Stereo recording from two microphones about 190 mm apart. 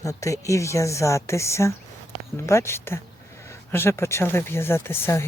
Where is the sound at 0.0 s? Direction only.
15° left (ahead or behind).